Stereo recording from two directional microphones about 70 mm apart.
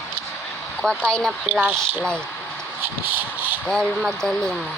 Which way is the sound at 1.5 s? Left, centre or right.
Centre.